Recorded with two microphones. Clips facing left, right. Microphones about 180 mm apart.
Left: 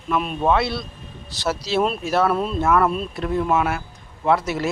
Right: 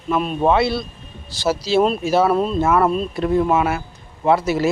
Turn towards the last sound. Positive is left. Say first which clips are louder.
# right 4 dB
turn(degrees=0)  # may be behind; listen again after turning